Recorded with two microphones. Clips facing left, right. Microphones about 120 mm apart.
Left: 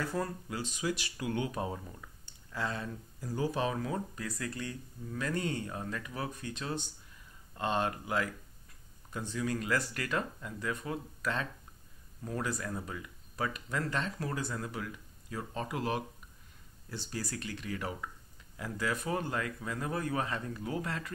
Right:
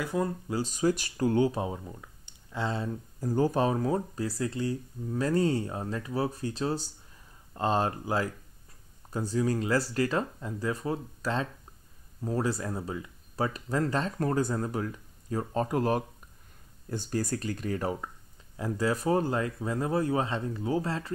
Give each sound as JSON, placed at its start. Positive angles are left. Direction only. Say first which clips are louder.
{"t": 0.0, "sound": "speech", "louder": "right 5 dB", "side_deg": -15}
{"t": 0.5, "sound": "speech", "louder": "right 8 dB", "side_deg": -40}
{"t": 1.7, "sound": "speech", "louder": "right 3 dB", "side_deg": -20}
{"t": 3.2, "sound": "speech", "louder": "right 7 dB", "side_deg": -45}